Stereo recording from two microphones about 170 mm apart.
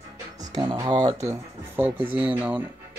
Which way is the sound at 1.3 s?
10° right (ahead or behind).